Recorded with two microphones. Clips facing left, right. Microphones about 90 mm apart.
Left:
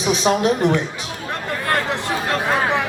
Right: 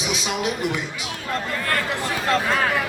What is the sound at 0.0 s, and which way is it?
Speech, 35° left (ahead or behind).